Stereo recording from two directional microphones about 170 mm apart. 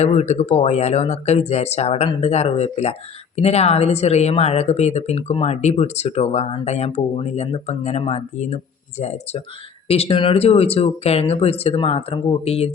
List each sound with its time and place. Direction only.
0.0 s speech: 40° left (ahead or behind)